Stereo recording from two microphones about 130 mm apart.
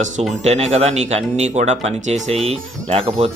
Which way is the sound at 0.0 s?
60° right (ahead or behind).